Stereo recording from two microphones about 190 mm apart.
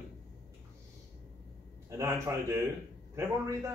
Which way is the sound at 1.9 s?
15° right (ahead or behind).